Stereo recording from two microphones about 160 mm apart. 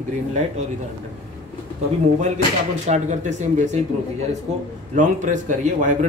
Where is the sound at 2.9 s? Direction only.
50° right (ahead or behind).